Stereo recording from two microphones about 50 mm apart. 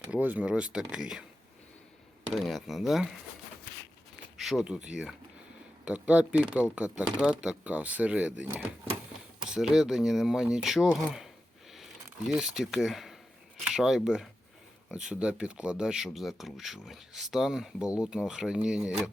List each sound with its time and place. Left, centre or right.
0.2 s speech: right
0.4 s speech: right
2.3 s speech: centre
4.4 s a sound: centre
4.6 s speech: centre
7.6 s speech: right
9.5 s speech: centre
12.4 s speech: centre
16.0 s speech: centre
17.9 s speech: right